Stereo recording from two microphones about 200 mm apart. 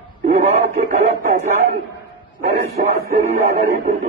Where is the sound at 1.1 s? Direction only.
50° right (ahead or behind).